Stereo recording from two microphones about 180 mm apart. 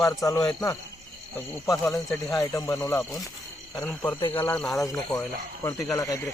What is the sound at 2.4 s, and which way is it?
Speech, 20° left (ahead or behind).